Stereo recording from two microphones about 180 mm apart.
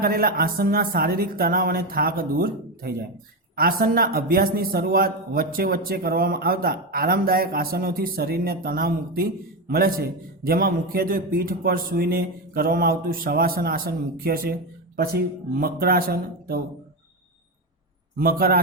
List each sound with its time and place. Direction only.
0.0 s a man's voice: 55° right (ahead or behind)
18.2 s a man's voice: 55° right (ahead or behind)